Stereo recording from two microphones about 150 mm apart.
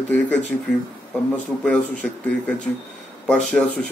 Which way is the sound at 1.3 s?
5° left (ahead or behind).